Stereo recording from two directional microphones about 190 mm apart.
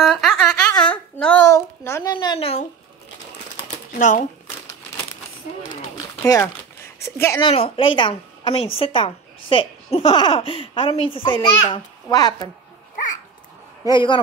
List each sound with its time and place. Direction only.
0.0 s a sound: centre (ahead or behind)
1.5 s a child's voice: 15° left (ahead or behind)
2.1 s a woman's voice: 30° left (ahead or behind)
4.0 s speech: 40° left (ahead or behind)
6.2 s speech: 15° left (ahead or behind)
7.4 s a woman's voice: 30° left (ahead or behind)
13.8 s a woman's voice: 25° left (ahead or behind)